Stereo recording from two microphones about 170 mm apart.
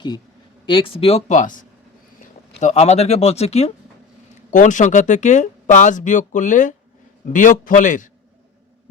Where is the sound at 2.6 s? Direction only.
40° left (ahead or behind).